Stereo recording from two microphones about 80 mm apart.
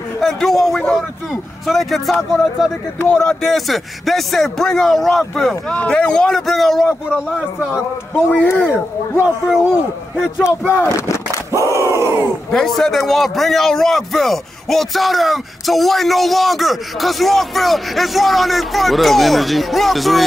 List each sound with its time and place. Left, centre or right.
0.2 s a man's voice: centre
8.5 s speech: left
10.2 s speech: left
11.6 s crowd: right
12.4 s a man's voice: centre